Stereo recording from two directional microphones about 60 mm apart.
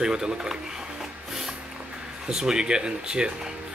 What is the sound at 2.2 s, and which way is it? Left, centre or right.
Speech, centre.